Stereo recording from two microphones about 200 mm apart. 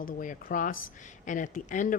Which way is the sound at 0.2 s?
40° left (ahead or behind).